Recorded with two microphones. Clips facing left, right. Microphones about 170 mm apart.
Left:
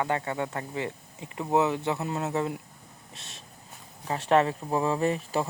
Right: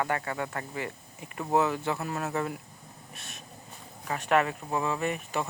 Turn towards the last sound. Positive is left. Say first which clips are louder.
# left 4 dB
turn(degrees=30)  # may be behind; listen again after turning